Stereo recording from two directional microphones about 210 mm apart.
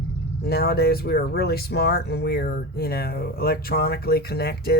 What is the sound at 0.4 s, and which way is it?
Speech, 50° left (ahead or behind).